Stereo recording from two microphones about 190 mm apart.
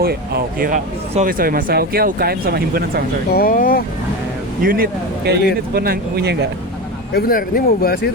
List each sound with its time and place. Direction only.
0.0 s speech: 55° right (ahead or behind)
3.3 s speech: 50° left (ahead or behind)
4.6 s speech: 50° right (ahead or behind)
7.1 s speech: 50° left (ahead or behind)